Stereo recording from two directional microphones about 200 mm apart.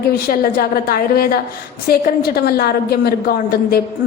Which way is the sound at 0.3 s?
45° left (ahead or behind).